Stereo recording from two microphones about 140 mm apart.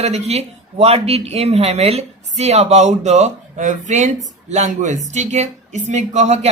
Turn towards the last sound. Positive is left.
turn(degrees=-55)  # may be behind; listen again after turning